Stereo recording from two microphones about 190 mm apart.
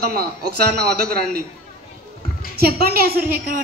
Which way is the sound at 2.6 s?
55° right (ahead or behind).